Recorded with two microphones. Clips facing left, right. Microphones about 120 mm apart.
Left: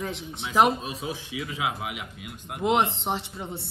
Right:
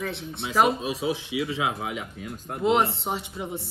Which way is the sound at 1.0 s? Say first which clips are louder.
Right 6 dB; 25° right (ahead or behind).